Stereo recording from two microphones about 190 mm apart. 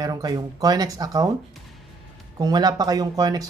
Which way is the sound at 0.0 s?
20° right (ahead or behind).